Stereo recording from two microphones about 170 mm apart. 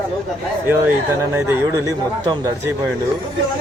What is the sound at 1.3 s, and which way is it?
Speech, 15° right (ahead or behind).